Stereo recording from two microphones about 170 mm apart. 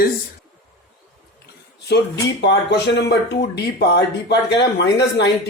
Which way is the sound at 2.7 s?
90° left.